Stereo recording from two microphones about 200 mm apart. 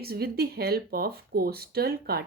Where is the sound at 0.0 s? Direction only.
50° right (ahead or behind).